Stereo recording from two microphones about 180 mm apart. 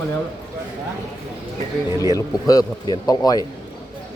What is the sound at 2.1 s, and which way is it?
Speech, 20° left (ahead or behind).